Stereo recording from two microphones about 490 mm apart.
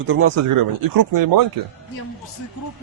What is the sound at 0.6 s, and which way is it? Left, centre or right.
Speech, right.